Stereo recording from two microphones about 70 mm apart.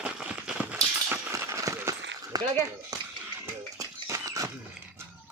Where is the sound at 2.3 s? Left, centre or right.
Right.